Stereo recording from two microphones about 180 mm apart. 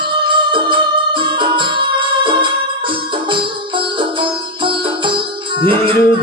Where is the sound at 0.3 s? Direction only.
25° right (ahead or behind).